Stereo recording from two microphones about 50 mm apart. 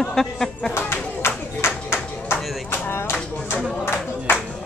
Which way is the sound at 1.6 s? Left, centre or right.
Left.